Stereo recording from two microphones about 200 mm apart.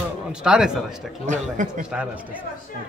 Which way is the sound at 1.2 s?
40° right (ahead or behind).